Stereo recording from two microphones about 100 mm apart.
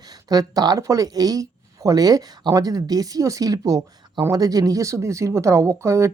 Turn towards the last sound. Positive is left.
turn(degrees=-30)  # may be behind; listen again after turning